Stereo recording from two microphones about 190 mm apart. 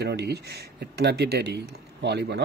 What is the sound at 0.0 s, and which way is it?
Speech, 60° right (ahead or behind).